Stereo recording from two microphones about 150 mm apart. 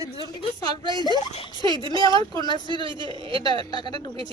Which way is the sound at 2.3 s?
30° left (ahead or behind).